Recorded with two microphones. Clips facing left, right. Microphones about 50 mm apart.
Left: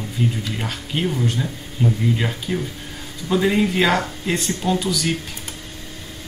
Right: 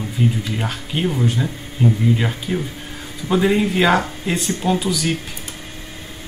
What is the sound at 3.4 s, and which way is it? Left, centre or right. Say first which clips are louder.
Speech: right 1 dB; centre.